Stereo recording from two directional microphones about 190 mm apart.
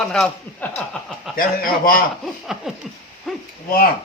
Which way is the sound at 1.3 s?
50° left (ahead or behind).